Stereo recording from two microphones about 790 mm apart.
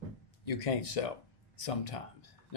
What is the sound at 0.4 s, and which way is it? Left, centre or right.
A man's voice, left.